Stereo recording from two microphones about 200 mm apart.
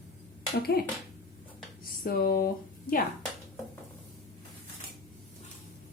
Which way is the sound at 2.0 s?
50° left (ahead or behind).